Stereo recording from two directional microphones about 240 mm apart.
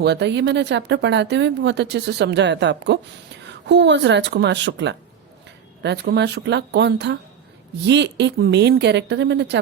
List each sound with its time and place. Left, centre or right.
0.0 s speech: right